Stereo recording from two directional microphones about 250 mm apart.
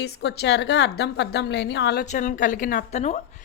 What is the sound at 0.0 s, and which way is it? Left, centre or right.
A woman's voice, left.